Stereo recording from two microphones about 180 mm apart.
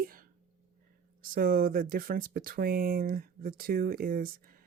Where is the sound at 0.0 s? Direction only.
50° right (ahead or behind).